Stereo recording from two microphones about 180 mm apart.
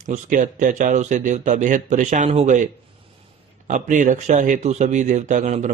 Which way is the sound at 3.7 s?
45° right (ahead or behind).